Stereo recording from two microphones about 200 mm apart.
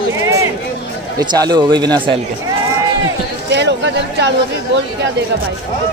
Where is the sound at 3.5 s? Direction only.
60° right (ahead or behind).